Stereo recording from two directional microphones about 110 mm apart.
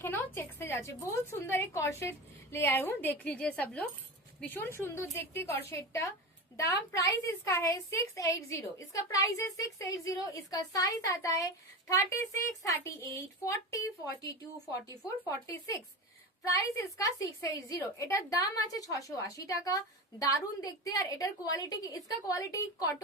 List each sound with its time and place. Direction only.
0.0 s a sound: 20° left (ahead or behind)
0.3 s a woman's voice: 20° left (ahead or behind)
12.6 s a woman's voice: 30° left (ahead or behind)
15.3 s a woman's voice: 30° left (ahead or behind)